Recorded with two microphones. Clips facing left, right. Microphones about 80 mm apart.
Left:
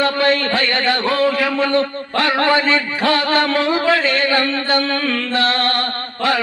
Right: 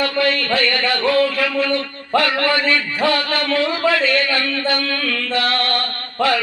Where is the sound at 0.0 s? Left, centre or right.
Left.